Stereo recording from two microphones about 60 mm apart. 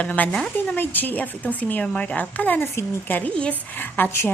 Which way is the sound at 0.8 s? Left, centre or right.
Left.